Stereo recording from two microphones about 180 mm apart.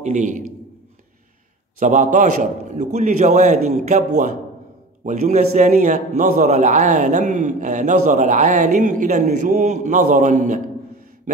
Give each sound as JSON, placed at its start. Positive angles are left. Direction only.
{"t": 0.0, "sound": "a man's voice", "side_deg": -40}
{"t": 1.8, "sound": "a man's voice", "side_deg": -45}